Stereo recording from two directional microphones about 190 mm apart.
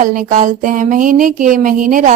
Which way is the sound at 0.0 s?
45° right (ahead or behind).